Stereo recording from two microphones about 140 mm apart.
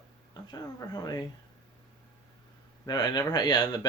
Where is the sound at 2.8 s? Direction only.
30° left (ahead or behind).